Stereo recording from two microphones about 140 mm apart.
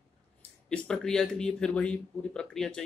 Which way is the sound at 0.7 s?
5° left (ahead or behind).